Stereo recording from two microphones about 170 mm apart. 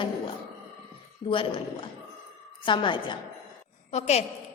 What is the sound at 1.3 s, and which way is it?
A woman's voice, 30° left (ahead or behind).